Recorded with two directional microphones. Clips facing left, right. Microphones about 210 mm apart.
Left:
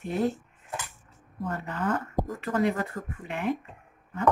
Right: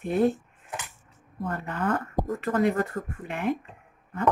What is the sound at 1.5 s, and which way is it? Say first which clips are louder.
Speech: right 1 dB; 55° right (ahead or behind).